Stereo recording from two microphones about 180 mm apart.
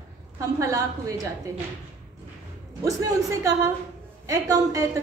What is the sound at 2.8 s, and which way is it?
A woman's voice, 20° right (ahead or behind).